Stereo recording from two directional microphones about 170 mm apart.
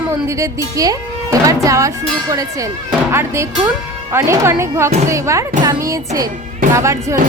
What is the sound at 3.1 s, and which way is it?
Speech, 15° right (ahead or behind).